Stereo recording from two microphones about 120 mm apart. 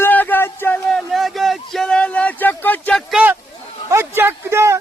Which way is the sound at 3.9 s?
20° right (ahead or behind).